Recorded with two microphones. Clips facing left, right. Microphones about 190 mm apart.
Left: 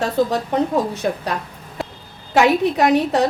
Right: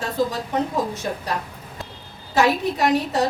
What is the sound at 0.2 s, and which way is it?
A woman's voice, 65° left (ahead or behind).